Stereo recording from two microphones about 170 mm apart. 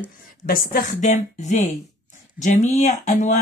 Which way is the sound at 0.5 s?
55° left (ahead or behind).